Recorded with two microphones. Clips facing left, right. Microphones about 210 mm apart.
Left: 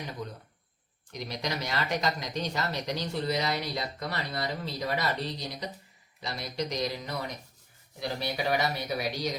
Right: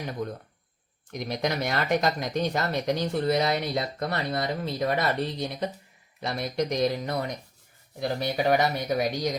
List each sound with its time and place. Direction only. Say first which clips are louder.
0.2 s speech: right 7 dB; 50° right (ahead or behind)